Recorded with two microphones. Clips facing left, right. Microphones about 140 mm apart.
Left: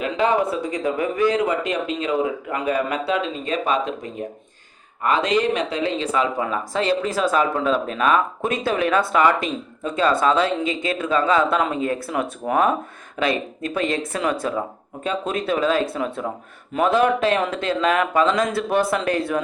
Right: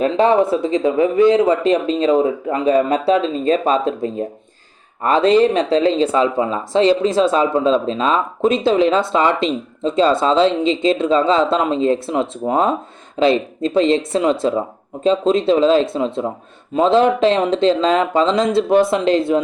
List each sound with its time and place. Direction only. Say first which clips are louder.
0.0 s speech: right 6 dB; 35° right (ahead or behind)
0.5 s speech: right 7 dB; 25° right (ahead or behind)